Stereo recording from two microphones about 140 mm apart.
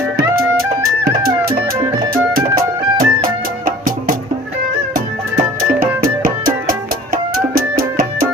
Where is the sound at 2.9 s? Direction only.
90° right.